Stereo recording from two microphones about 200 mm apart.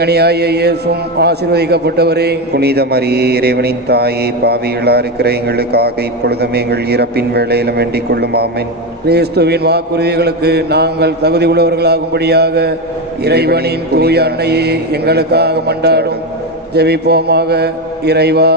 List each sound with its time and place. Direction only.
0.0 s mantra: 55° right (ahead or behind)
1.2 s a man's voice: 55° right (ahead or behind)
9.0 s mantra: 55° right (ahead or behind)
13.2 s a man's voice: 55° right (ahead or behind)
16.7 s mantra: 55° right (ahead or behind)